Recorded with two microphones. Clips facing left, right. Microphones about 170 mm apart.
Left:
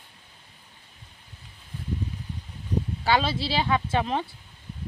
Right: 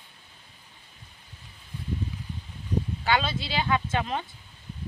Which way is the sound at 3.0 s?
30° left (ahead or behind).